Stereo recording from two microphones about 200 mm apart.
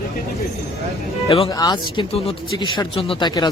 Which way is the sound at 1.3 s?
25° left (ahead or behind).